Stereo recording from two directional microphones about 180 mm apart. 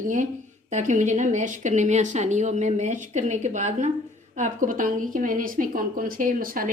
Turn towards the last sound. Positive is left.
turn(degrees=-50)  # may be behind; listen again after turning